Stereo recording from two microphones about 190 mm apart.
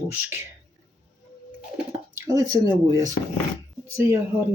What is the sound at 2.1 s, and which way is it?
Speech, 20° right (ahead or behind).